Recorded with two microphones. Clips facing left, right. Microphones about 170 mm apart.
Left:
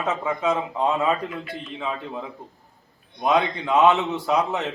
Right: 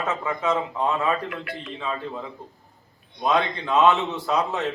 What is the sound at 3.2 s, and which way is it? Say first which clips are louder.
A man's voice: left 2 dB; 20° left (ahead or behind).